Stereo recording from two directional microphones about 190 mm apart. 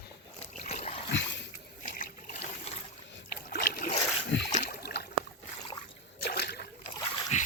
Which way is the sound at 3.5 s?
55° left (ahead or behind).